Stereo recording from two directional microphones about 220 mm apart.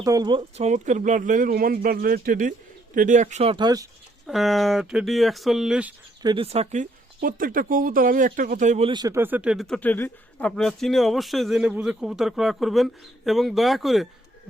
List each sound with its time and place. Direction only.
0.0 s speech: 15° right (ahead or behind)
4.3 s a man's voice: centre (ahead or behind)
6.2 s speech: 25° right (ahead or behind)
8.9 s a man's voice: 15° right (ahead or behind); by 14.1 s centre (ahead or behind)